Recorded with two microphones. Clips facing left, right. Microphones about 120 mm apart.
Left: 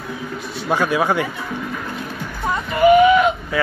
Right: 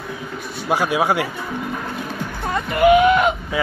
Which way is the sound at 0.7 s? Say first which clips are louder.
Even; 15° right (ahead or behind).